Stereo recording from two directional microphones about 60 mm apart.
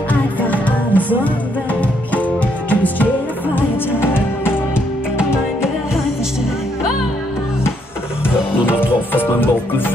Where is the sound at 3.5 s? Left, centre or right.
Left.